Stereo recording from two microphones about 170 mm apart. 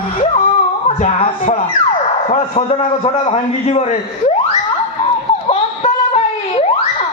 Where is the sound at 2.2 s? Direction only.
45° left (ahead or behind).